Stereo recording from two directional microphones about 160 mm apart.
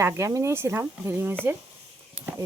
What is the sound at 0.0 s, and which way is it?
Speech, 20° right (ahead or behind).